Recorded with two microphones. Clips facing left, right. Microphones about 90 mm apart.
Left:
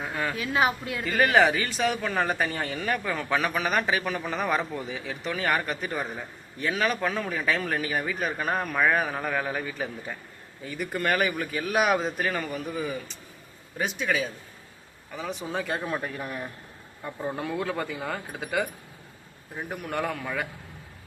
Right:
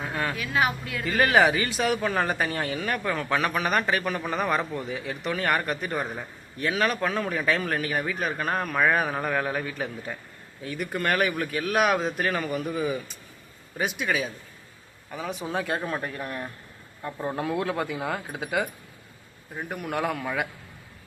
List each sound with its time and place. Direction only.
0.0 s a sound: centre (ahead or behind)
0.3 s speech: 25° left (ahead or behind)
1.0 s speech: centre (ahead or behind)